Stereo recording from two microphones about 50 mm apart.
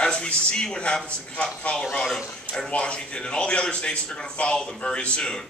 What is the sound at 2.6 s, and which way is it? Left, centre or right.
A man's voice, left.